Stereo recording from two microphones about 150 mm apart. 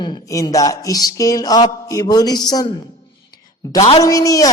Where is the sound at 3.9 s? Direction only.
25° left (ahead or behind).